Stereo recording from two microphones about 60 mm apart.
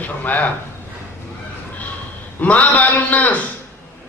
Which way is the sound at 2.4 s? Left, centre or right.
Left.